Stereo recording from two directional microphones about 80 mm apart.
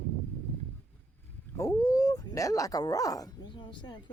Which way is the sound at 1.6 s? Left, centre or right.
Left.